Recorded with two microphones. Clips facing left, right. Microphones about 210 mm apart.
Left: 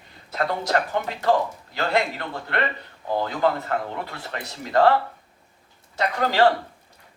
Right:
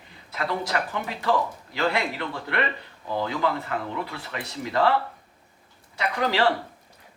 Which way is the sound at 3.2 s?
45° left (ahead or behind).